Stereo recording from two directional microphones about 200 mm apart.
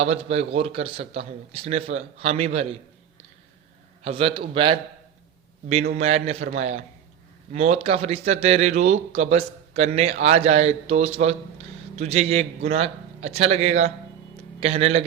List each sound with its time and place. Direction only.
0.0 s speech: 30° right (ahead or behind)
4.0 s a man's voice: 30° right (ahead or behind)
6.0 s speech: 30° right (ahead or behind)